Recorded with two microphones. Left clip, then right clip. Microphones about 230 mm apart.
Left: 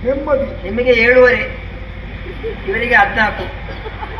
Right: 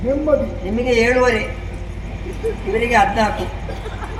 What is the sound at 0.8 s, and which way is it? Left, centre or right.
Speech, right.